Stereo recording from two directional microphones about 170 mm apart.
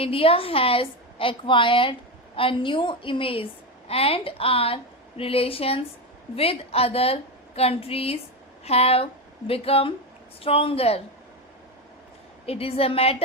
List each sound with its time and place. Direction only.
0.0 s a woman's voice: 35° left (ahead or behind)
12.5 s a woman's voice: 35° left (ahead or behind)